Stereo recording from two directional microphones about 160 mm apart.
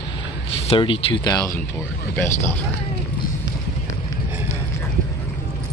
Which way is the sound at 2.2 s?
15° left (ahead or behind).